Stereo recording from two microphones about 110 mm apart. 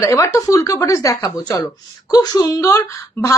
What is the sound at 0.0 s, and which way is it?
A woman's voice, 30° left (ahead or behind).